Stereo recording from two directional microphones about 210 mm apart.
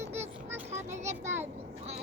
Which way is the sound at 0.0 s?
30° right (ahead or behind).